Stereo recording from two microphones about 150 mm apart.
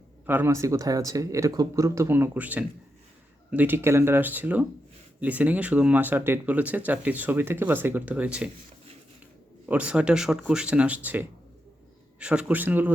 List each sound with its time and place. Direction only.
0.3 s speech: 15° right (ahead or behind)
9.6 s speech: 10° right (ahead or behind)